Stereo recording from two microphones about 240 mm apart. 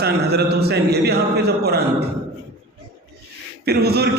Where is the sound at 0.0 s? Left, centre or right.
Right.